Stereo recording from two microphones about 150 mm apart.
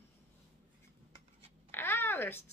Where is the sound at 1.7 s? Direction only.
15° left (ahead or behind).